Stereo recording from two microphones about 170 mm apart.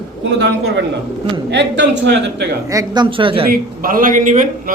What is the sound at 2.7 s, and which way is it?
Speech, 20° right (ahead or behind).